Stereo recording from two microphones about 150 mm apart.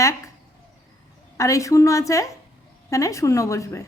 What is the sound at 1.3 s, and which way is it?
A woman's voice, 20° left (ahead or behind).